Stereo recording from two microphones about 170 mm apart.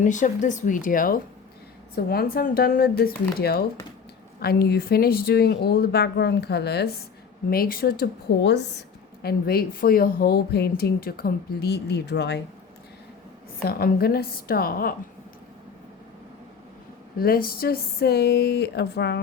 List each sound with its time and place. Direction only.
0.0 s speech: 45° left (ahead or behind); by 6.9 s 75° left (ahead or behind)
7.5 s speech: 60° left (ahead or behind); by 8.6 s 85° left
9.2 s speech: 65° left (ahead or behind); by 12.4 s 80° left
13.7 s speech: 65° left (ahead or behind)
17.2 s speech: 60° left (ahead or behind); by 19.2 s 80° left